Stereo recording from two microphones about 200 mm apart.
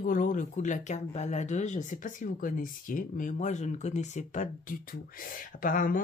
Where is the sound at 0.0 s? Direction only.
45° left (ahead or behind).